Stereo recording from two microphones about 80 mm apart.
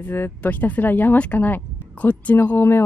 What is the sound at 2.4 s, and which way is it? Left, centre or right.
Speech, left.